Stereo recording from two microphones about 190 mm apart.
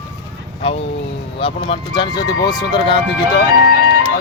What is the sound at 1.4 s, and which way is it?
Speech, 25° left (ahead or behind).